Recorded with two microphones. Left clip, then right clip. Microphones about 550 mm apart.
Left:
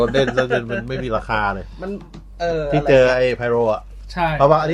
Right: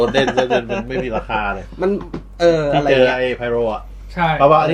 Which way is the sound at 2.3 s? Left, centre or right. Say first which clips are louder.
Right 7 dB; right.